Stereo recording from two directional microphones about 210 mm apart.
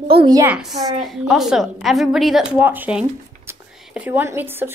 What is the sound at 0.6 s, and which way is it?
A woman's voice, centre (ahead or behind).